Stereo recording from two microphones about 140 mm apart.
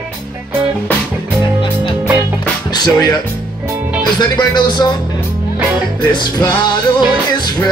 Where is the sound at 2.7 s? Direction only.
30° left (ahead or behind).